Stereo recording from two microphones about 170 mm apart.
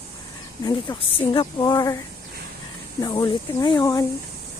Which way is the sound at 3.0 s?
25° left (ahead or behind).